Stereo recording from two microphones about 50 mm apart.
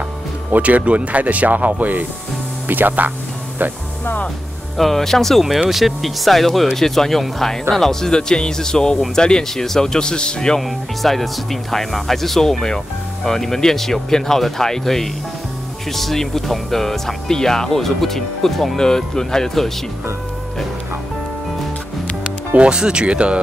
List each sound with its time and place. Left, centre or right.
0.5 s speech: right
4.7 s speech: centre
11.0 s speech: centre
22.5 s speech: right